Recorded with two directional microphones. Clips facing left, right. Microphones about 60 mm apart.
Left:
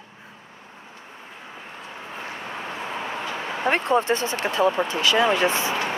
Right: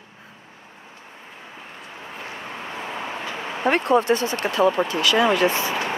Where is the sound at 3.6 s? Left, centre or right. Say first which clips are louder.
Right 3 dB; left.